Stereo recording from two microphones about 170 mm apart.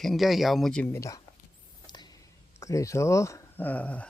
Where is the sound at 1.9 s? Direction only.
25° left (ahead or behind).